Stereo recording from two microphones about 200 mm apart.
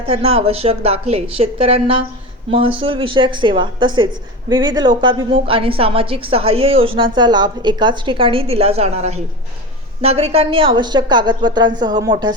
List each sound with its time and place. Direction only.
0.1 s a woman's voice: 30° right (ahead or behind)